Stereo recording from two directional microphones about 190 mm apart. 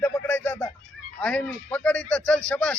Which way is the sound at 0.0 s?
10° left (ahead or behind).